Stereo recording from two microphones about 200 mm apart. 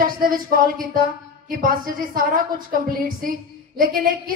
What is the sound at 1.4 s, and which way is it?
A woman's voice, 45° right (ahead or behind).